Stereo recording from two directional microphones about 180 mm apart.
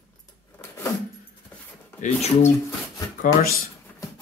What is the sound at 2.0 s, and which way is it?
Speech, 40° left (ahead or behind).